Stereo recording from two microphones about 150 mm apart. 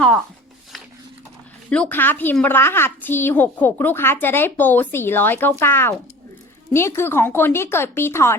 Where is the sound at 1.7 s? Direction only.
10° left (ahead or behind).